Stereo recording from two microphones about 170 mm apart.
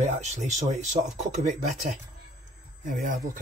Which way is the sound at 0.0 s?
45° right (ahead or behind).